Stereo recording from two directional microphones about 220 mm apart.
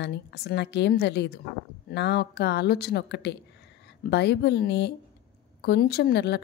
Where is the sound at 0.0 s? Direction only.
50° left (ahead or behind).